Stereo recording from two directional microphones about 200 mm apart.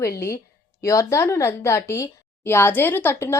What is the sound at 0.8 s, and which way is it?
A woman's voice, 15° left (ahead or behind).